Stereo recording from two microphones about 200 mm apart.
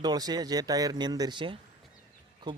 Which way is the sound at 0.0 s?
20° right (ahead or behind).